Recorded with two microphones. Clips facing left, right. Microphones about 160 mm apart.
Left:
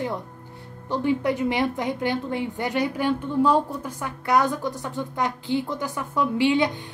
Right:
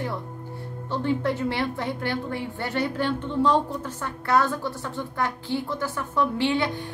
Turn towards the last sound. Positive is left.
turn(degrees=20)  # may be behind; listen again after turning